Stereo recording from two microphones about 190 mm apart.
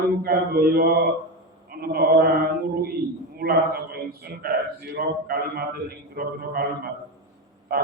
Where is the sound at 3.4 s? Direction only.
55° right (ahead or behind).